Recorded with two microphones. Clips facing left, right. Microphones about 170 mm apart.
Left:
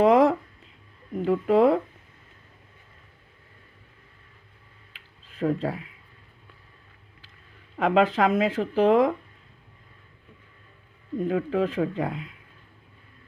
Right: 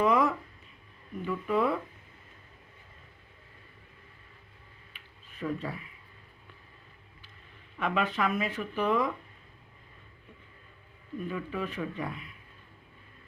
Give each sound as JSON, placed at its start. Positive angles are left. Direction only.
{"t": 0.0, "sound": "a sound", "side_deg": 90}
{"t": 1.1, "sound": "speech", "side_deg": 90}
{"t": 5.4, "sound": "speech", "side_deg": 90}
{"t": 7.8, "sound": "speech", "side_deg": 90}
{"t": 11.2, "sound": "speech", "side_deg": 85}